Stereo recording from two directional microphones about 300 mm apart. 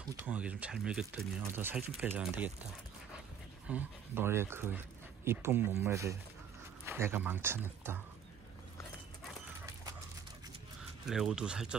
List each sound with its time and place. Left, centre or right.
0.2 s speech: centre
3.6 s speech: centre
11.1 s speech: centre